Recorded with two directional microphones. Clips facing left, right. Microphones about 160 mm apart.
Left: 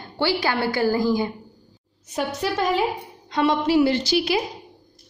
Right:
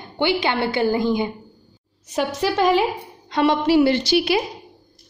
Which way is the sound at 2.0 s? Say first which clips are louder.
Right 3 dB; 90° right.